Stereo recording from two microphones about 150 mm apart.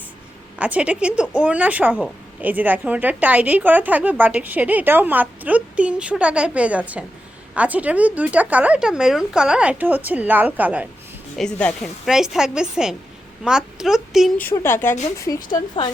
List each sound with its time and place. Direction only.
0.6 s a woman's voice: 10° right (ahead or behind)
11.3 s a woman's voice: 5° left (ahead or behind)
14.3 s speech: 15° left (ahead or behind)
15.2 s speech: 25° left (ahead or behind)